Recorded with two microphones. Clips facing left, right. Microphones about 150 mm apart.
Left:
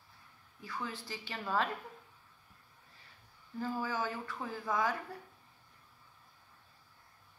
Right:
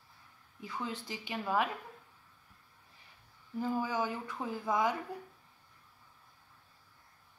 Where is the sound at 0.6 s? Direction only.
20° right (ahead or behind).